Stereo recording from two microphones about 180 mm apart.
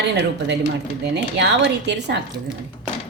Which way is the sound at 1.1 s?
70° right (ahead or behind).